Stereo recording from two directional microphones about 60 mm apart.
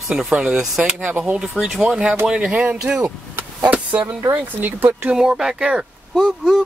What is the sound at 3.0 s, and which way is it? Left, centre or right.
Vehicle, right.